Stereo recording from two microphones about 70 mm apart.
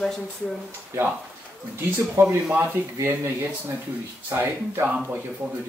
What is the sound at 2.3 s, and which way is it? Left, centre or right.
Speech, right.